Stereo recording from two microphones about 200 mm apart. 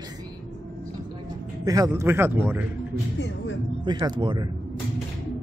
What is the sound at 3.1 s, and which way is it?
Speech, 65° left (ahead or behind).